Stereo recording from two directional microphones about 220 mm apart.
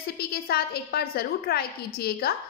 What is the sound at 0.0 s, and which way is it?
A woman's voice, 45° left (ahead or behind).